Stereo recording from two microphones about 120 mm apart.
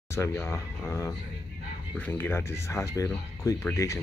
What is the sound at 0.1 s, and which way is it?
Speech, 20° left (ahead or behind).